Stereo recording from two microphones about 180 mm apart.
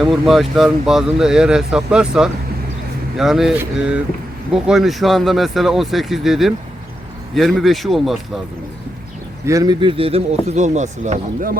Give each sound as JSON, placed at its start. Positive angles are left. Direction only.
{"t": 0.0, "sound": "speech", "side_deg": 0}
{"t": 9.5, "sound": "speech", "side_deg": -20}